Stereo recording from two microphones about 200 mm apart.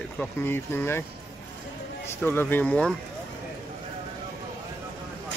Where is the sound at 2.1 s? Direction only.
10° left (ahead or behind).